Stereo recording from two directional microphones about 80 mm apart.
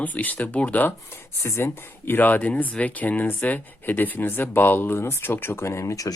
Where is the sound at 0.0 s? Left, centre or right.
Left.